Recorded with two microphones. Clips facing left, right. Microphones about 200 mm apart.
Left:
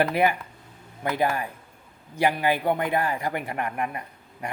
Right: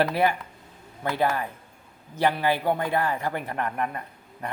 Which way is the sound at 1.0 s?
15° left (ahead or behind).